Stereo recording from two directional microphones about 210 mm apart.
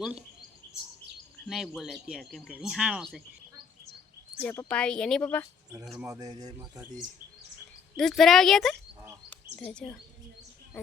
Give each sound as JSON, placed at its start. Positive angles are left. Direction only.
{"t": 0.0, "sound": "speech", "side_deg": -5}
{"t": 1.5, "sound": "speech", "side_deg": 0}
{"t": 4.4, "sound": "speech", "side_deg": 5}
{"t": 6.1, "sound": "speech", "side_deg": -15}
{"t": 7.9, "sound": "speech", "side_deg": 0}